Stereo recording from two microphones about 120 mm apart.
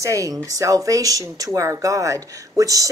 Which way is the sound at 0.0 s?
25° right (ahead or behind).